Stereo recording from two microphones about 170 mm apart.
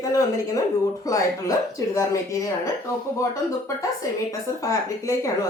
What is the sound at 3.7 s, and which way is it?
A woman's voice, 20° left (ahead or behind).